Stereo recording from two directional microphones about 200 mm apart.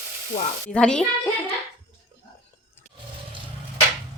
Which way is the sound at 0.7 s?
5° left (ahead or behind).